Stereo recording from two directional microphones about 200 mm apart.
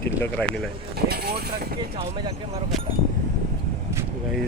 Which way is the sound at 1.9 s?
25° right (ahead or behind).